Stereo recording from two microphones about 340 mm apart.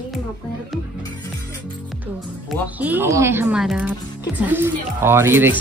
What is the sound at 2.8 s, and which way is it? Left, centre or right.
A woman's voice, centre.